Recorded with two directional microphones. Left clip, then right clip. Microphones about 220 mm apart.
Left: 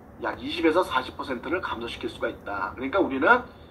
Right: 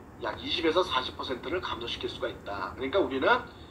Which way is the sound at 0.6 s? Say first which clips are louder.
Left 4 dB; 25° left (ahead or behind).